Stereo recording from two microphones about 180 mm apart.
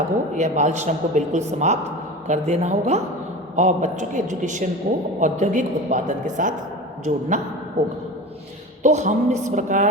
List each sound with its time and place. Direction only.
0.3 s a man's voice: 40° right (ahead or behind)
8.8 s a woman's voice: 40° right (ahead or behind)